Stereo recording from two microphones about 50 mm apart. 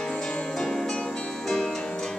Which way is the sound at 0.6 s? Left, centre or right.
Centre.